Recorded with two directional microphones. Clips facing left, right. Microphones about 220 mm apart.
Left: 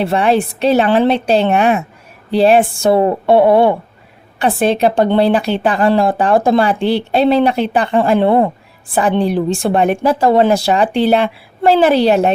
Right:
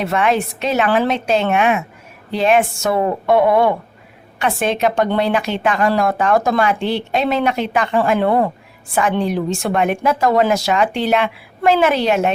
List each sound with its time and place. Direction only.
0.0 s a woman's voice: 30° left (ahead or behind)